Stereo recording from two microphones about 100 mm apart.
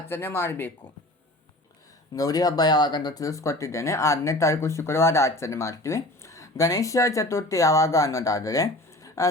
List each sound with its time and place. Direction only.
0.1 s speech: 25° left (ahead or behind)
2.1 s speech: 40° left (ahead or behind)